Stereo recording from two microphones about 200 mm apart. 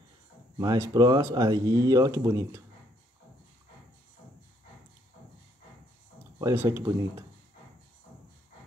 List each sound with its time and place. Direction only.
0.6 s speech: 20° right (ahead or behind)
6.4 s speech: 10° right (ahead or behind)